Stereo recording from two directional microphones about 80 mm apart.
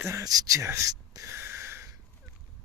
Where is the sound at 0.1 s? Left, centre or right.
Right.